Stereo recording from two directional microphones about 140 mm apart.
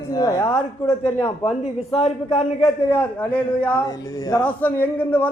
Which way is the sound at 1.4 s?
45° left (ahead or behind).